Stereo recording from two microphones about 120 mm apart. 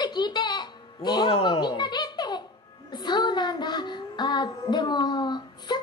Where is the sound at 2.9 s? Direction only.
40° left (ahead or behind).